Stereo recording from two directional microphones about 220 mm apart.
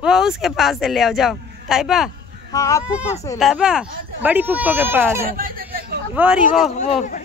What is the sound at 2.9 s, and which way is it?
Speech, 5° right (ahead or behind).